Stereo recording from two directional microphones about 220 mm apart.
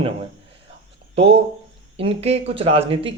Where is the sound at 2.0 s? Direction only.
25° right (ahead or behind).